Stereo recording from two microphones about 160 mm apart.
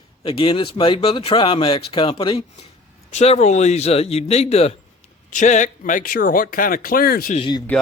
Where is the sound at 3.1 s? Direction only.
45° left (ahead or behind); by 7.3 s 70° left (ahead or behind).